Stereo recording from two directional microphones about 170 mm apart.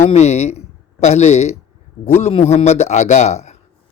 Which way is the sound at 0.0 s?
40° left (ahead or behind).